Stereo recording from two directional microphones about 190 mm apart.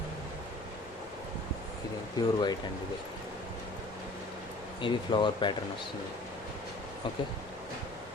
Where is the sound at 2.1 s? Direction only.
20° left (ahead or behind).